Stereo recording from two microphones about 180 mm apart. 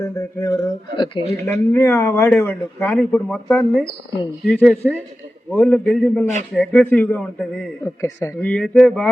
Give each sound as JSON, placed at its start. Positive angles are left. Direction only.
{"t": 0.0, "sound": "speech", "side_deg": 20}
{"t": 1.3, "sound": "a man's voice", "side_deg": 15}
{"t": 7.9, "sound": "speech", "side_deg": 15}